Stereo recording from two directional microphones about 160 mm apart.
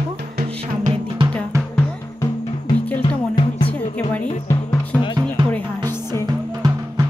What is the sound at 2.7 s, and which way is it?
Music, 35° left (ahead or behind).